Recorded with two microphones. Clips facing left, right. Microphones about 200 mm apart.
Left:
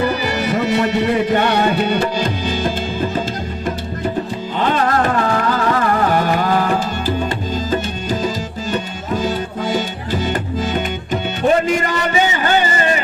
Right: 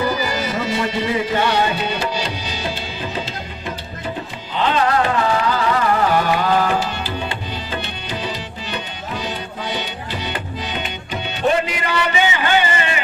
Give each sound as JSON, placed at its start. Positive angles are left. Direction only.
{"t": 0.2, "sound": "music", "side_deg": 65}
{"t": 4.5, "sound": "music", "side_deg": 50}
{"t": 11.6, "sound": "a sound", "side_deg": 45}